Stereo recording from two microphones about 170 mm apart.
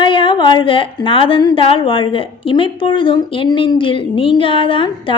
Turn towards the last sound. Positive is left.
turn(degrees=30)  # may be behind; listen again after turning